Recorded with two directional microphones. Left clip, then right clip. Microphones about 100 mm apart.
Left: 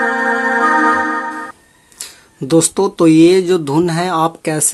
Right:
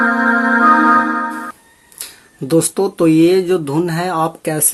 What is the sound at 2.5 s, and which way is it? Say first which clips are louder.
Speech: left 2 dB; 30° left (ahead or behind).